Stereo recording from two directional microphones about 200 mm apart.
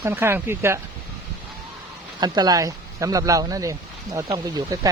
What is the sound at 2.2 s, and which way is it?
Speech, 20° right (ahead or behind).